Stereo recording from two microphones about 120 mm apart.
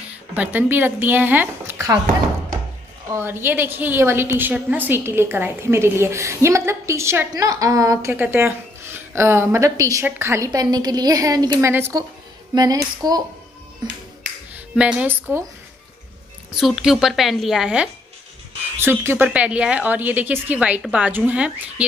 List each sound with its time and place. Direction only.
0.1 s speech: 15° right (ahead or behind)
3.1 s a woman's voice: 20° right (ahead or behind)
14.8 s a woman's voice: 10° right (ahead or behind)
16.5 s a woman's voice: centre (ahead or behind)
18.8 s a woman's voice: 20° right (ahead or behind)